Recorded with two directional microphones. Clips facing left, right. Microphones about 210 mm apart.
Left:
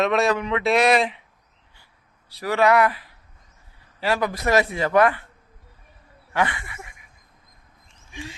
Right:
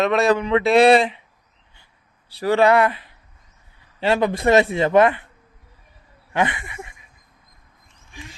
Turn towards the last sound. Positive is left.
turn(degrees=-25)  # may be behind; listen again after turning